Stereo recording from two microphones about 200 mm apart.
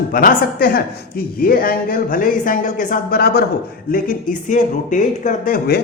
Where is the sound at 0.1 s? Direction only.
45° left (ahead or behind).